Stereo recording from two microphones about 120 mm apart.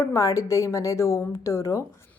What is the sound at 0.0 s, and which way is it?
Speech, 25° left (ahead or behind).